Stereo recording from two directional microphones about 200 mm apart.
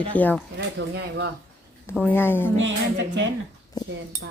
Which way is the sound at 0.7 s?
55° right (ahead or behind).